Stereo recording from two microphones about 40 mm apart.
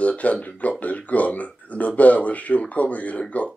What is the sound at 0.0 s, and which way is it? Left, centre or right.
Speech, left.